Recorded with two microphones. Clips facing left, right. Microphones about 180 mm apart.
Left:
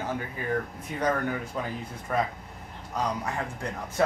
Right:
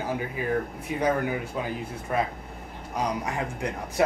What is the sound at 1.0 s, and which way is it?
Speech, 10° right (ahead or behind).